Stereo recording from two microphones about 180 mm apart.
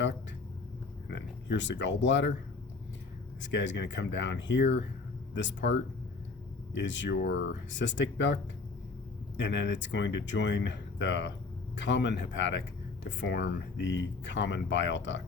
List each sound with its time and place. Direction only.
1.1 s speech: 80° left
3.4 s speech: 80° left
9.4 s speech: 75° left (ahead or behind)
13.1 s speech: 75° left (ahead or behind)